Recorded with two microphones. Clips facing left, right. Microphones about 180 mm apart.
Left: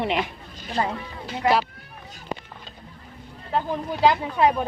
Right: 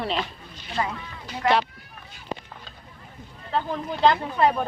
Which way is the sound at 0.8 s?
30° left (ahead or behind).